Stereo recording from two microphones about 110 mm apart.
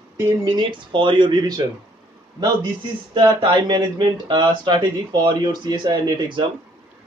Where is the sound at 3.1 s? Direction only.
45° right (ahead or behind).